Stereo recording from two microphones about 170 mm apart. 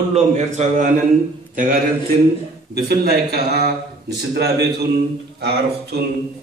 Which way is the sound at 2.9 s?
70° right (ahead or behind).